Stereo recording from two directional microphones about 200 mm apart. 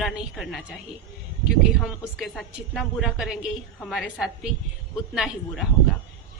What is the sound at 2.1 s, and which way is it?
A woman's voice, centre (ahead or behind).